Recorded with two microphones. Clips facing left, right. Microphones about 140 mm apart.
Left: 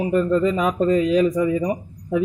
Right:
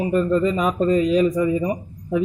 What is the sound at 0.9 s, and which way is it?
Speech, 30° right (ahead or behind).